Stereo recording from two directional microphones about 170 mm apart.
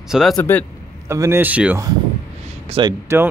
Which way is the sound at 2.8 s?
30° right (ahead or behind).